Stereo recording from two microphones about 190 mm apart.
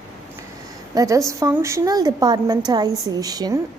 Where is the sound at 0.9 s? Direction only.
15° right (ahead or behind).